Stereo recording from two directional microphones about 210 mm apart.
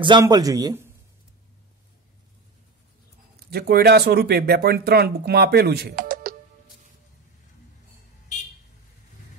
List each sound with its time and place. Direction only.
0.0 s a man's voice: 20° right (ahead or behind)
3.4 s speech: 50° right (ahead or behind)